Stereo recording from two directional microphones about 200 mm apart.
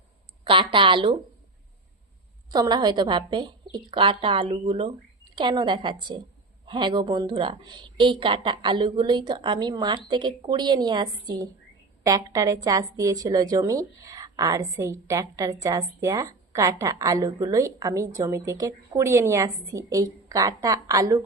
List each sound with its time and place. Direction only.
0.4 s a woman's voice: 25° right (ahead or behind)
2.5 s a woman's voice: 20° right (ahead or behind)